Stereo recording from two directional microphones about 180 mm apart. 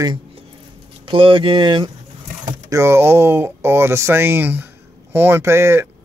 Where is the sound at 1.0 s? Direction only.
30° right (ahead or behind).